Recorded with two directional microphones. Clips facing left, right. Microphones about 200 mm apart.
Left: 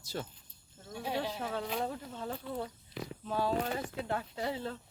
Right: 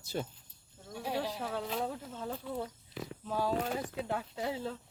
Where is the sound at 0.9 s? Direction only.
5° right (ahead or behind).